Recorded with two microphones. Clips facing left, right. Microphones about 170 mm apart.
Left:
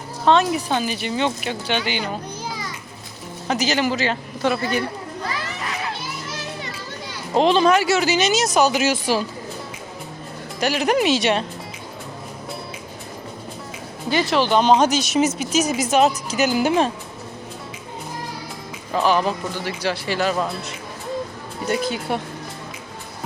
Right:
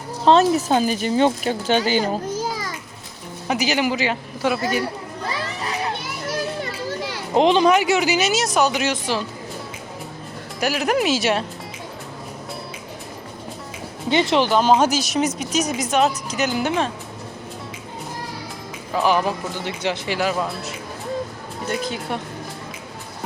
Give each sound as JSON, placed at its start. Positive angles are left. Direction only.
{"t": 0.3, "sound": "speech", "side_deg": -35}
{"t": 2.4, "sound": "children playing", "side_deg": -45}
{"t": 3.4, "sound": "speech", "side_deg": -10}
{"t": 7.3, "sound": "speech", "side_deg": -15}
{"t": 10.6, "sound": "speech", "side_deg": -5}
{"t": 14.1, "sound": "speech", "side_deg": -25}
{"t": 14.5, "sound": "speech", "side_deg": -5}
{"t": 19.0, "sound": "speech", "side_deg": -15}
{"t": 22.1, "sound": "speech", "side_deg": 5}